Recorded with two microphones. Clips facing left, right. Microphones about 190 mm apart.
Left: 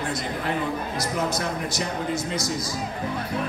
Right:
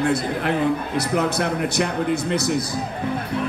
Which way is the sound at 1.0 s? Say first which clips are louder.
Right 4 dB; 65° right (ahead or behind).